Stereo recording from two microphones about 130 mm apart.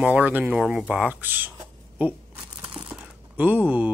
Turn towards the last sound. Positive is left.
turn(degrees=-15)  # may be behind; listen again after turning